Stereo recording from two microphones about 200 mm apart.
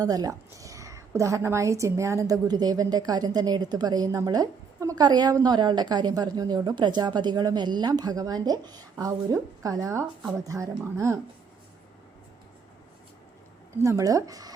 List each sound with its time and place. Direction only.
0.0 s speech: 20° right (ahead or behind)
13.8 s speech: 15° right (ahead or behind)